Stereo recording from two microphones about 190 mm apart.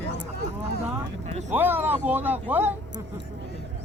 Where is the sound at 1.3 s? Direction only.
40° right (ahead or behind).